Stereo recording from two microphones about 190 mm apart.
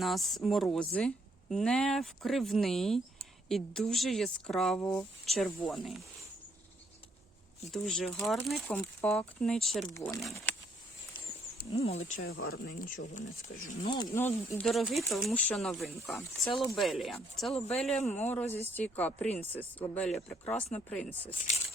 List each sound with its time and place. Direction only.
0.0 s speech: centre (ahead or behind)
7.7 s speech: 5° left (ahead or behind)
9.9 s speech: 15° left (ahead or behind)
10.5 s a sound: 10° left (ahead or behind)
11.7 s speech: 35° left (ahead or behind)
12.2 s speech: 60° left (ahead or behind)
13.5 s speech: 90° left
13.8 s speech: 25° left (ahead or behind)
14.2 s speech: 10° left (ahead or behind)
14.7 s speech: centre (ahead or behind)